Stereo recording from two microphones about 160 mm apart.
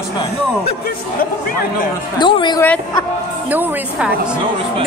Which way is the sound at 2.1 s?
30° left (ahead or behind).